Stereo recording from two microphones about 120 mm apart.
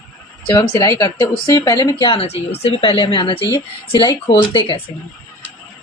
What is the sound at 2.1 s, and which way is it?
A woman's voice, 60° left (ahead or behind).